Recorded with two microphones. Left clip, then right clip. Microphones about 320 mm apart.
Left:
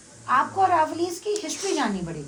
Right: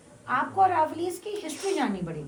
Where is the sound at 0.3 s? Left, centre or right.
Centre.